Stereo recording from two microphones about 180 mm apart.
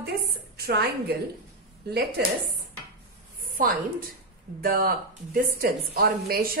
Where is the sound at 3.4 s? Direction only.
50° right (ahead or behind).